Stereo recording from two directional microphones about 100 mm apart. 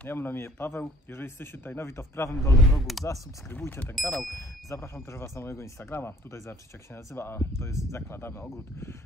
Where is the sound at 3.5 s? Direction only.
20° left (ahead or behind).